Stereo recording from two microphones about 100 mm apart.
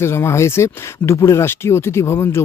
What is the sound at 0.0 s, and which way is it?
Speech, 25° left (ahead or behind).